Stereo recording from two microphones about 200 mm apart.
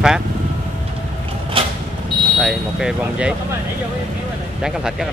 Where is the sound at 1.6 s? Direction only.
25° right (ahead or behind).